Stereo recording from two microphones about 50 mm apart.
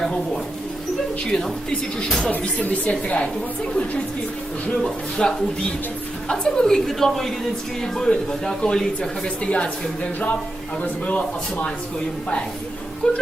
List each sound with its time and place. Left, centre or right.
2.0 s a woman's voice: centre
2.4 s speech: left
4.8 s a woman's voice: centre; by 11.7 s left
13.0 s a woman's voice: centre